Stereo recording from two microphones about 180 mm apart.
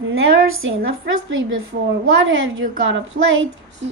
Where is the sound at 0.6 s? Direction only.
90° right.